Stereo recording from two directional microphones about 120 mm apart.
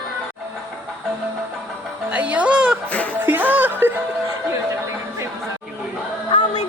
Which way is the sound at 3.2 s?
15° right (ahead or behind).